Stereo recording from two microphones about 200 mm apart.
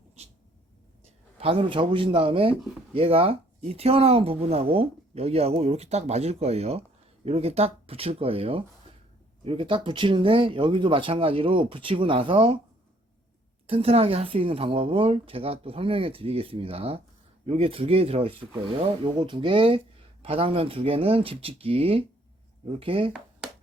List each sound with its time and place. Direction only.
0.2 s a sound: 30° right (ahead or behind)
1.4 s speech: 25° right (ahead or behind)
13.7 s speech: 30° right (ahead or behind)